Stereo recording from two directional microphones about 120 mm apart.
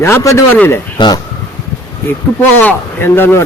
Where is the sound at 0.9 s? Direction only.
40° left (ahead or behind).